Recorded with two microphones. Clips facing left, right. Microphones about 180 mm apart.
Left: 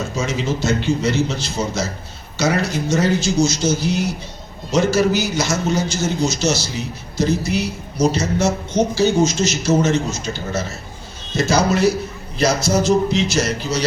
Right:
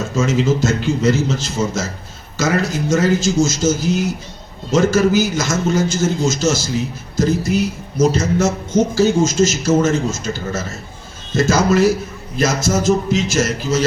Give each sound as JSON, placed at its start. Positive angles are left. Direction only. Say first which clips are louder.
{"t": 0.3, "sound": "a man's voice", "louder": "right 4 dB", "side_deg": -45}